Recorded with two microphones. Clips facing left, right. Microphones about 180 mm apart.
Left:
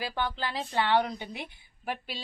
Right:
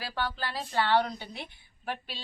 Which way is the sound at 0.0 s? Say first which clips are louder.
Left 2 dB; 20° left (ahead or behind).